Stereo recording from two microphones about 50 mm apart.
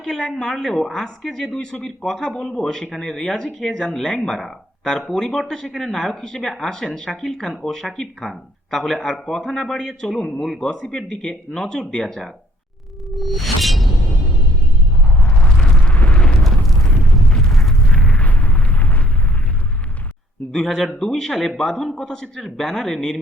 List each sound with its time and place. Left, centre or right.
0.0 s speech: centre
13.1 s a sound: centre
15.2 s eruption: left
15.4 s a sound: centre
16.0 s eruption: left
17.0 s a sound: centre
17.7 s eruption: centre
20.5 s speech: centre
21.9 s speech: centre